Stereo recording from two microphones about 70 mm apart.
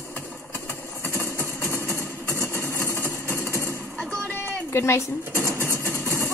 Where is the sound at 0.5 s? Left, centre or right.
Left.